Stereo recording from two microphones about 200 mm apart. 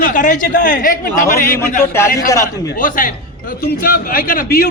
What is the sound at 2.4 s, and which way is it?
Speech, 40° left (ahead or behind).